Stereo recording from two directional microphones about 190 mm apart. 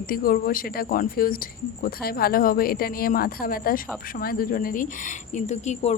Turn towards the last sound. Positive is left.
turn(degrees=35)  # may be behind; listen again after turning